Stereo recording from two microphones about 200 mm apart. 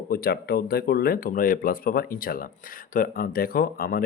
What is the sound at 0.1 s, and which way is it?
Speech, 50° left (ahead or behind).